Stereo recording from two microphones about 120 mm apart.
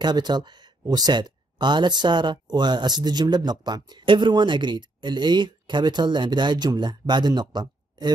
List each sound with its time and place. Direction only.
0.0 s speech: 35° right (ahead or behind)